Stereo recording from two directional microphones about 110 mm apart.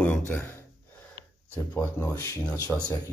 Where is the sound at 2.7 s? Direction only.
5° left (ahead or behind).